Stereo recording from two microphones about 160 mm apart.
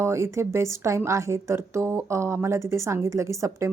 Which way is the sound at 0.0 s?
15° right (ahead or behind).